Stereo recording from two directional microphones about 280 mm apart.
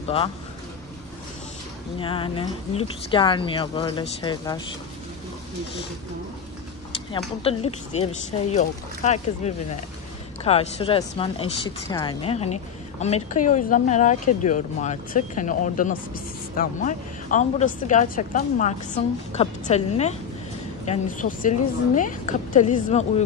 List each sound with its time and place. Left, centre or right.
0.0 s a man's voice: centre
2.0 s speech: centre
7.1 s a woman's voice: left